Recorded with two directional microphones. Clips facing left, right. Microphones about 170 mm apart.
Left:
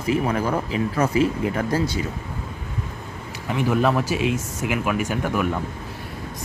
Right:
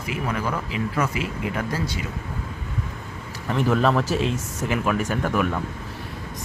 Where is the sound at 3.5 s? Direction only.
10° left (ahead or behind).